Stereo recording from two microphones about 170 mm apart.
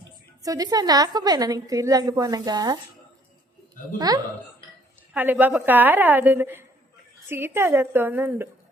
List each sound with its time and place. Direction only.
0.4 s a woman's voice: 20° right (ahead or behind)
3.9 s a woman's voice: 25° right (ahead or behind)
5.1 s a woman's voice: 10° right (ahead or behind)